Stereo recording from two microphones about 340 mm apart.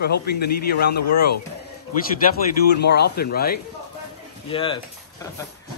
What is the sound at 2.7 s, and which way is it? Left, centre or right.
Speech, left.